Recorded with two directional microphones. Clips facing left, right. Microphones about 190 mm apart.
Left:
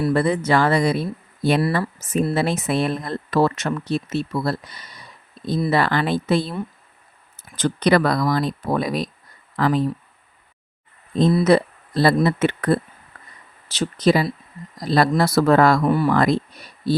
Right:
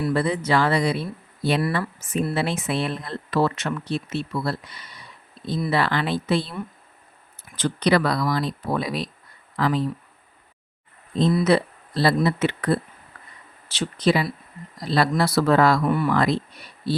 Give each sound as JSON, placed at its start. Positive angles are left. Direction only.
{"t": 0.1, "sound": "speech", "side_deg": 50}
{"t": 1.6, "sound": "speech", "side_deg": 35}
{"t": 5.4, "sound": "a sound", "side_deg": 45}
{"t": 5.7, "sound": "speech", "side_deg": 45}
{"t": 11.4, "sound": "speech", "side_deg": 45}
{"t": 15.8, "sound": "speech", "side_deg": 35}